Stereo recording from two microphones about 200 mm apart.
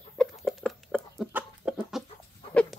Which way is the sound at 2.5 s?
5° left (ahead or behind).